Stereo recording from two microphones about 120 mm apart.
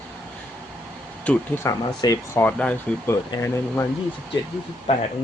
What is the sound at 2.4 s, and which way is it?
Speech, 10° left (ahead or behind).